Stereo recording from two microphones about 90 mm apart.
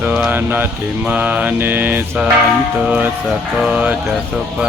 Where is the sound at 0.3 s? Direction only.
20° right (ahead or behind).